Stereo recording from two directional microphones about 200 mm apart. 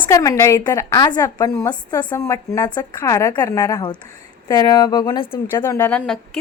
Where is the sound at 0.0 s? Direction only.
15° left (ahead or behind).